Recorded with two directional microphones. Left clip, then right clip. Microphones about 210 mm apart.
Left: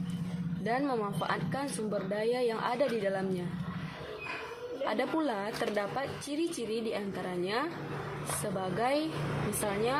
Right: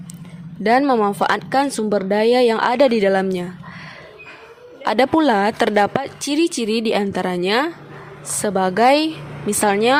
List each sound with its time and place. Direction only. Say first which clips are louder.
0.6 s speech: right 17 dB; 50° right (ahead or behind)
4.9 s speech: right 17 dB; 50° right (ahead or behind)